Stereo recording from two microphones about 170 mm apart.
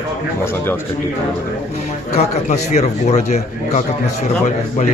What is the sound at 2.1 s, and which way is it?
A man's voice, 40° left (ahead or behind).